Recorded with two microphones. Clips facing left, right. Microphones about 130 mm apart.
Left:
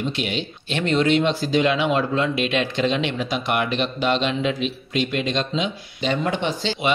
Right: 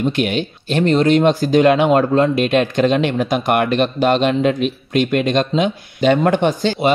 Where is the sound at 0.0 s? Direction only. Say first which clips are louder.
Right 7 dB; 55° right (ahead or behind).